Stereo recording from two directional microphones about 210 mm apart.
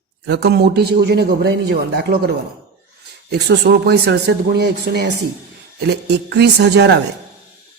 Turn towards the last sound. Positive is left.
turn(degrees=-55)  # may be behind; listen again after turning